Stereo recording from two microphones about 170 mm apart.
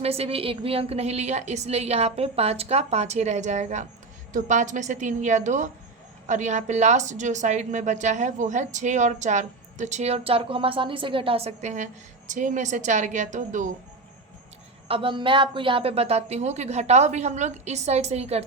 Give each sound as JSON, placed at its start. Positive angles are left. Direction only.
{"t": 0.0, "sound": "a woman's voice", "side_deg": -35}
{"t": 14.8, "sound": "a woman's voice", "side_deg": -30}